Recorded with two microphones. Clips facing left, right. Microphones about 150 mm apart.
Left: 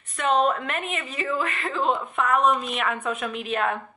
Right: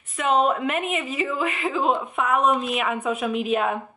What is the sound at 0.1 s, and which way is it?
A woman's voice, 5° right (ahead or behind).